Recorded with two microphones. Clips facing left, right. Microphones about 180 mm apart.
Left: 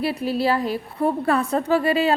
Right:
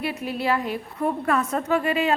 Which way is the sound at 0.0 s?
35° left (ahead or behind).